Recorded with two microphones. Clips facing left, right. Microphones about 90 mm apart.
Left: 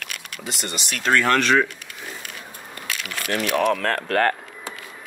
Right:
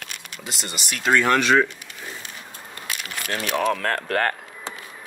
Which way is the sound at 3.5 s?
5° left (ahead or behind).